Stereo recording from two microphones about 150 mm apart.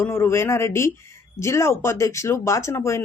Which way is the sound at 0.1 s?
15° left (ahead or behind).